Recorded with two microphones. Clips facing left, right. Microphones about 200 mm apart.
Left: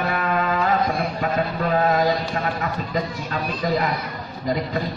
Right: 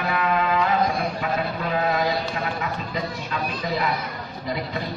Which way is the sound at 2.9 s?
45° left (ahead or behind).